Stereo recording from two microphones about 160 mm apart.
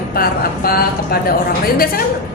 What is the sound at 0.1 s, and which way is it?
Speech, 70° left (ahead or behind).